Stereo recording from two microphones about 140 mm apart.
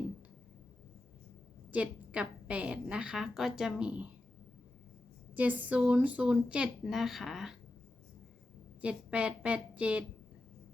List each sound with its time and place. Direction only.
1.7 s a woman's voice: 10° right (ahead or behind)
5.3 s a woman's voice: 10° right (ahead or behind)
8.8 s a woman's voice: 10° right (ahead or behind)